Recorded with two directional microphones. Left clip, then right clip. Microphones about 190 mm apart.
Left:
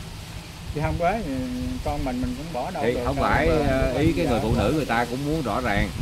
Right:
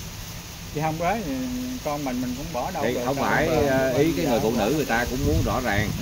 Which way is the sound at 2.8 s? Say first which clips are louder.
Left 2 dB; 30° left (ahead or behind).